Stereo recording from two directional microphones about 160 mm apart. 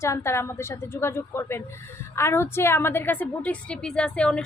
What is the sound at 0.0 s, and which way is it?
A woman's voice, 15° left (ahead or behind).